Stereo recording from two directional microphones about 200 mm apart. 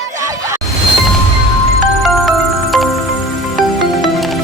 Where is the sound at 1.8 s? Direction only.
Centre (ahead or behind).